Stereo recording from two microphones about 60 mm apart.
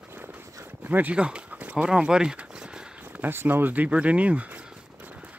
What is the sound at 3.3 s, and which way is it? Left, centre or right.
Speech, right.